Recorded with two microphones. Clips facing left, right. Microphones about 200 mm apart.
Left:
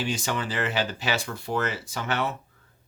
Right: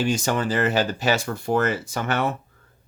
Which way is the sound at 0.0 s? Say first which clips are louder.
Right 6 dB; 45° right (ahead or behind).